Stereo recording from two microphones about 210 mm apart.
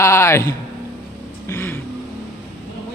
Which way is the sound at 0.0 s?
15° left (ahead or behind).